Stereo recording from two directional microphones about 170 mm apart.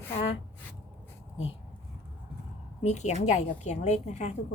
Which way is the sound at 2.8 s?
40° left (ahead or behind).